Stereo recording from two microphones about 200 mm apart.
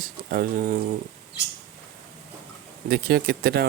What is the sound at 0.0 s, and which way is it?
Speech, 45° right (ahead or behind).